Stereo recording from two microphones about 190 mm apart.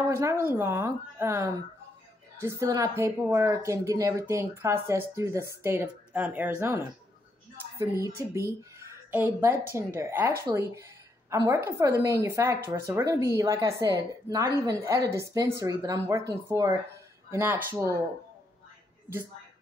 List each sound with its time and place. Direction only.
0.1 s a woman's voice: 15° right (ahead or behind)
7.8 s a woman's voice: 15° right (ahead or behind)